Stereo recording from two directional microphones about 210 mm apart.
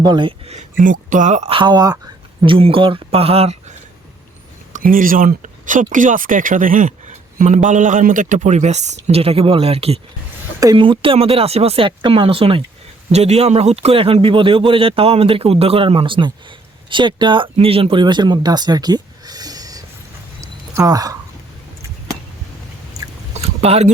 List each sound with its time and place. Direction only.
0.0 s a man's voice: 20° right (ahead or behind)
4.7 s a man's voice: 40° right (ahead or behind); by 19.8 s 15° right (ahead or behind)
20.4 s a sound: 15° right (ahead or behind)
23.4 s speech: 30° right (ahead or behind)